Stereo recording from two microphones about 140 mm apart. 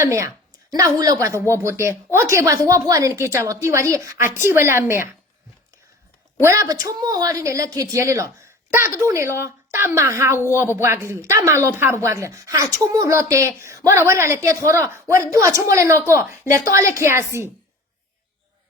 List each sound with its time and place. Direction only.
0.0 s a woman's voice: 20° right (ahead or behind)
6.4 s a woman's voice: 20° right (ahead or behind)